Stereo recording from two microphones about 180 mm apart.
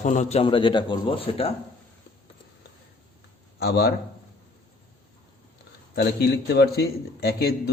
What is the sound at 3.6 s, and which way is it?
Speech, 60° left (ahead or behind).